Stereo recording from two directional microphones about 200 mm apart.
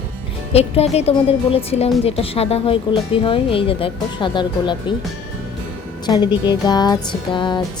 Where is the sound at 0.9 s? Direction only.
30° left (ahead or behind).